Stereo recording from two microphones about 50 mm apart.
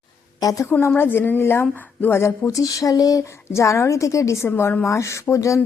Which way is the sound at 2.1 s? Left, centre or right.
Left.